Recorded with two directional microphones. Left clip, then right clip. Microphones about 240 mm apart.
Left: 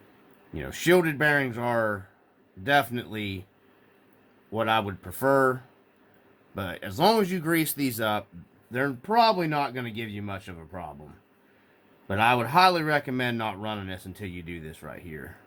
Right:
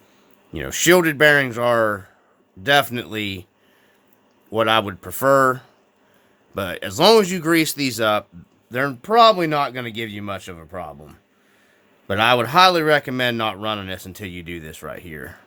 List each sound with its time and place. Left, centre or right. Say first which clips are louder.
0.5 s a man's voice: right 7 dB; right
4.5 s a man's voice: right 7 dB; right
12.0 s a man's voice: right 6 dB; right